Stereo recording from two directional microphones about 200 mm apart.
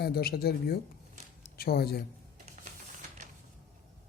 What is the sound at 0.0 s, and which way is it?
Speech, 50° left (ahead or behind).